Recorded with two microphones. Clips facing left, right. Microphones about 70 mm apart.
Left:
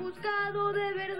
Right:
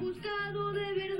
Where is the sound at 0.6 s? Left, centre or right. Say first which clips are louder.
Left 3 dB; left.